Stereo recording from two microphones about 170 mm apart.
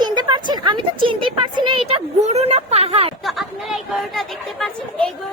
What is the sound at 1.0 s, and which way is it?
Speech, 30° right (ahead or behind).